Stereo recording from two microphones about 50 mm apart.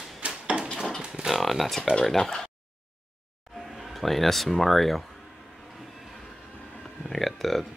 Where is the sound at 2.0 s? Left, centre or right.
Centre.